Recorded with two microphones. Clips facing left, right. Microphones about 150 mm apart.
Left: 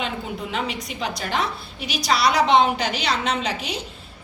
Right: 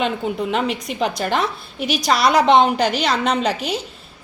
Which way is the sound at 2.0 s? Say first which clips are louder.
Right 3 dB; 50° right (ahead or behind).